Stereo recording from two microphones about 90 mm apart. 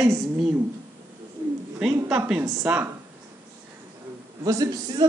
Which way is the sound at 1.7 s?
10° right (ahead or behind).